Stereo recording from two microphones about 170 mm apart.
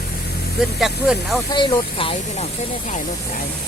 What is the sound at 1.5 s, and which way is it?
Speech, 30° left (ahead or behind).